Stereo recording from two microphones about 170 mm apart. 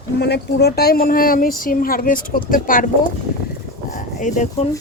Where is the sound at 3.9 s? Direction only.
45° left (ahead or behind).